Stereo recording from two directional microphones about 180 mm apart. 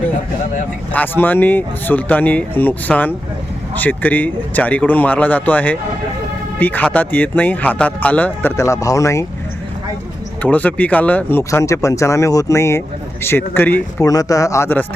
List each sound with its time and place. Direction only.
0.9 s speech: 10° left (ahead or behind)
10.4 s speech: 10° left (ahead or behind)